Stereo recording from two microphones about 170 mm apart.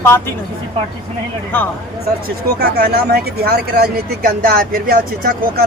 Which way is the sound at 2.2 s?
65° right (ahead or behind).